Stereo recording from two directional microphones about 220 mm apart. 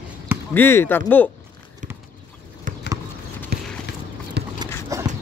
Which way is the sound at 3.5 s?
45° right (ahead or behind).